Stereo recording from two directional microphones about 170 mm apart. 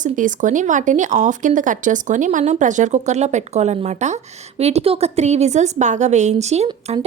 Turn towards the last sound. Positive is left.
turn(degrees=-40)  # may be behind; listen again after turning